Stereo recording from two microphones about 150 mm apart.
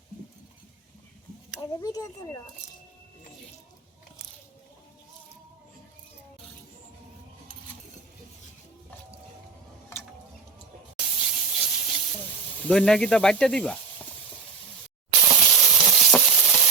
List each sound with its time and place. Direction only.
1.5 s speech: 25° left (ahead or behind)
10.9 s a sound: 5° right (ahead or behind)
12.6 s speech: 5° left (ahead or behind)
15.4 s stir: centre (ahead or behind)